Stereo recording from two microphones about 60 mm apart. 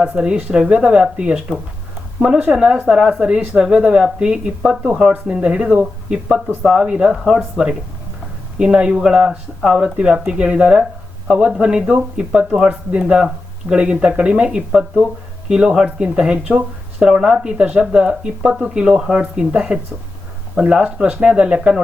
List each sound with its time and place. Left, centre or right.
0.2 s speech: right
5.1 s speech: centre